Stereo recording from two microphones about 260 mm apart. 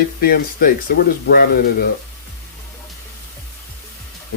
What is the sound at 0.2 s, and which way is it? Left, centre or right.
Speech, left.